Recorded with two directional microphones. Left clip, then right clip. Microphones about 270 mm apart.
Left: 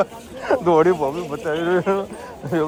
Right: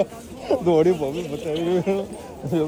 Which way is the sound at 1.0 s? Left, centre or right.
Left.